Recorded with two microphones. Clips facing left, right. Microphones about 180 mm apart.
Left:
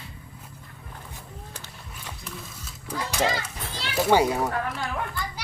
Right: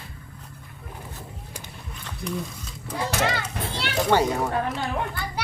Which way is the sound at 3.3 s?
65° right (ahead or behind).